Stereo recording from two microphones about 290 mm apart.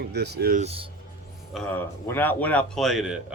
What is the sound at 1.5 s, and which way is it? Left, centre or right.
Speech, centre.